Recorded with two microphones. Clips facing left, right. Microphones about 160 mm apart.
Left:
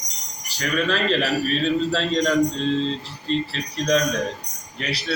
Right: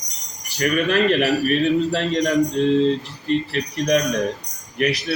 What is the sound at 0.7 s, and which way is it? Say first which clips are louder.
A man's voice: right 3 dB; 15° right (ahead or behind).